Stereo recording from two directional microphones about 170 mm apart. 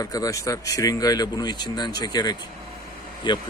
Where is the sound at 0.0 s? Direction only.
20° left (ahead or behind).